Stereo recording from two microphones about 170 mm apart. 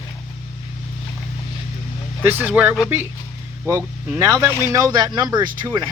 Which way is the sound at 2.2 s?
10° right (ahead or behind).